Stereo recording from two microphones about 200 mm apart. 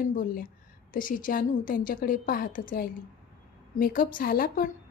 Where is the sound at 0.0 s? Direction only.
40° left (ahead or behind).